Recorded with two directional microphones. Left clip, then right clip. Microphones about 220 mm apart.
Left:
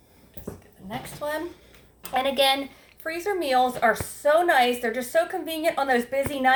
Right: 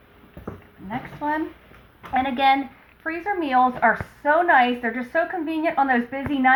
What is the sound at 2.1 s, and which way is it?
Speech, 55° left (ahead or behind).